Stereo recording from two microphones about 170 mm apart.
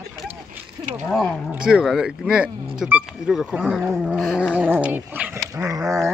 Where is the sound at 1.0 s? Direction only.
5° left (ahead or behind).